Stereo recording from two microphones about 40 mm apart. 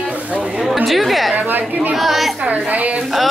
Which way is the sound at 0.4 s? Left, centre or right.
Right.